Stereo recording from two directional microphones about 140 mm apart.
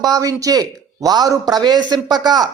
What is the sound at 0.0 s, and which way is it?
A man's voice, 25° right (ahead or behind).